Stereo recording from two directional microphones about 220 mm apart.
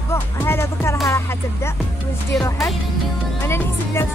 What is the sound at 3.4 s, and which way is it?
Music, 10° left (ahead or behind).